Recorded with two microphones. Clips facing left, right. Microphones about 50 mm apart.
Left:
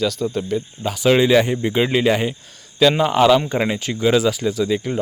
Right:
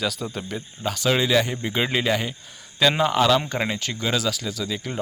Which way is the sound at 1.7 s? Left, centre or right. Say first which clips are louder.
Left 5 dB; centre.